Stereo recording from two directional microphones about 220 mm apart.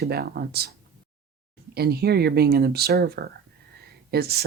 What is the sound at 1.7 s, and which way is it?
Speech, 45° right (ahead or behind).